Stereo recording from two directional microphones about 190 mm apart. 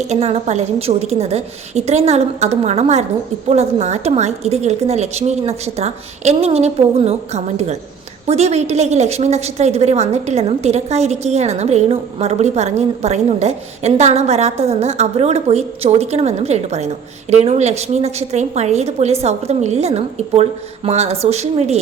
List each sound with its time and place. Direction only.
0.1 s a woman's voice: 35° right (ahead or behind)